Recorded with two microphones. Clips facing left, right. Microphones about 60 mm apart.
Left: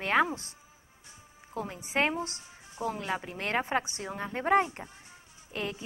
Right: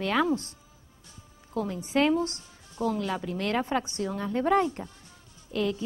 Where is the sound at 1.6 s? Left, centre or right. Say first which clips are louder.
Right 4 dB; centre.